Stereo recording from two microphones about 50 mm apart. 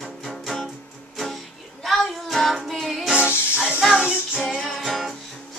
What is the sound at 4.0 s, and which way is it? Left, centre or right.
Music, centre.